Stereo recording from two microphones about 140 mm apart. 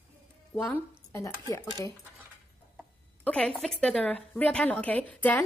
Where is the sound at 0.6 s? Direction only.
20° left (ahead or behind).